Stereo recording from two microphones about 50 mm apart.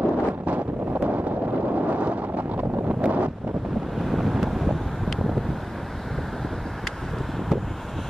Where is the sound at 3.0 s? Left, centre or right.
Right.